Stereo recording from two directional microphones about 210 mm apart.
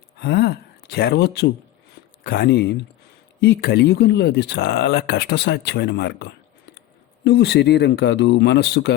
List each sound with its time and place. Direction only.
0.2 s speech: 50° left (ahead or behind)